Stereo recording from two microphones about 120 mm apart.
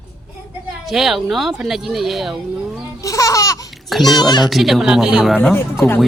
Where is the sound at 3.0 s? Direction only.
30° left (ahead or behind).